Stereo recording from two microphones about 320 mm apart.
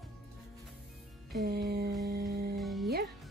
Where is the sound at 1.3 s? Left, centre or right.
Right.